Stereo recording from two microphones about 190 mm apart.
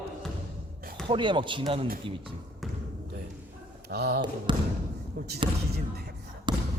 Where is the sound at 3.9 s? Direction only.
60° right (ahead or behind).